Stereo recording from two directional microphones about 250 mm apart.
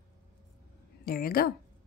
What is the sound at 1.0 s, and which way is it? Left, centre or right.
Speech, left.